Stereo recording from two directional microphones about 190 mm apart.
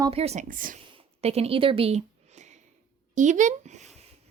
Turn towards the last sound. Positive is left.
turn(degrees=-35)  # may be behind; listen again after turning